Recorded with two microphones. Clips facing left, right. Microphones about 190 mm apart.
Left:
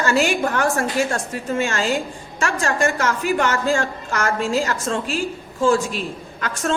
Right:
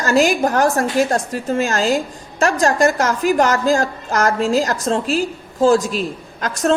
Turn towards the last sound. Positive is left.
turn(degrees=-40)  # may be behind; listen again after turning